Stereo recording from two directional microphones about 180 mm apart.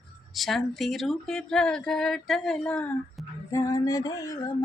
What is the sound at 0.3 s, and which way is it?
Speech, centre (ahead or behind).